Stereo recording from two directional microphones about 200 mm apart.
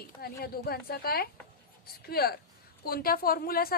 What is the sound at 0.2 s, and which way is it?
A woman's voice, 50° left (ahead or behind).